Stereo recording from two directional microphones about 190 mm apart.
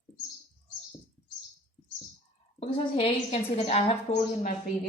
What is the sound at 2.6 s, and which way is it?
Speech, 30° left (ahead or behind).